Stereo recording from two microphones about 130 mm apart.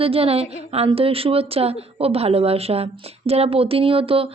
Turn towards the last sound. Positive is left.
turn(degrees=-45)  # may be behind; listen again after turning